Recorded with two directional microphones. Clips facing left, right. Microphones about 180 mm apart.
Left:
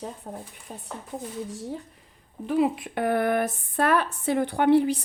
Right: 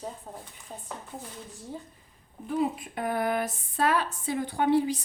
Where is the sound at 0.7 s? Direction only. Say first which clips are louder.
Left 2 dB; 70° left (ahead or behind).